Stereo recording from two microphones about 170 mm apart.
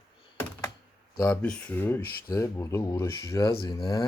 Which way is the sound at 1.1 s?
10° left (ahead or behind).